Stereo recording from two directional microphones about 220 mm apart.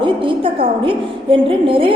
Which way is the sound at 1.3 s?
25° right (ahead or behind).